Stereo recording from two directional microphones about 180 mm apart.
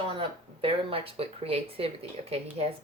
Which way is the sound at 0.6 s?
30° right (ahead or behind).